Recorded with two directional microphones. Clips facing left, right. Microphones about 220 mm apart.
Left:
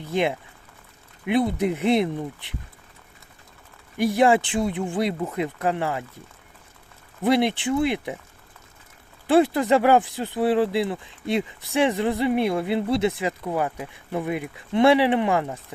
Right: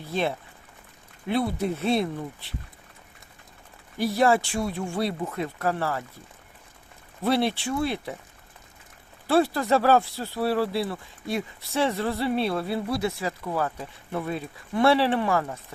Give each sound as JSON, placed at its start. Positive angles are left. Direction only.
{"t": 0.0, "sound": "speech", "side_deg": 15}
{"t": 3.9, "sound": "speech", "side_deg": 15}
{"t": 7.2, "sound": "speech", "side_deg": 15}
{"t": 9.2, "sound": "speech", "side_deg": 20}